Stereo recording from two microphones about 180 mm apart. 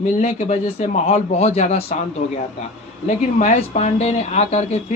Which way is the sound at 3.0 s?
40° left (ahead or behind).